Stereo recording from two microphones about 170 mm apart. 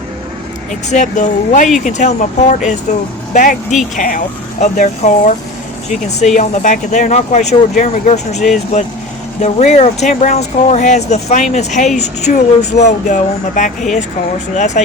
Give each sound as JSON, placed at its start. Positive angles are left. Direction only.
{"t": 0.7, "sound": "speech", "side_deg": 45}
{"t": 9.4, "sound": "speech", "side_deg": 40}